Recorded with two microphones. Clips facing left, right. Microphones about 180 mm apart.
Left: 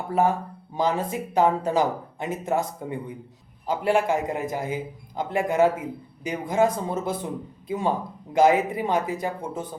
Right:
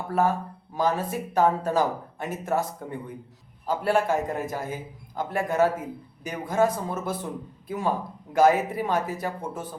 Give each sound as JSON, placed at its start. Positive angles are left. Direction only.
{"t": 0.1, "sound": "a man's voice", "side_deg": 15}